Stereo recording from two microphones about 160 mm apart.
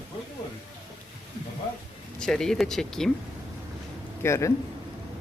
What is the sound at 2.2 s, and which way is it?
Speech, 5° left (ahead or behind).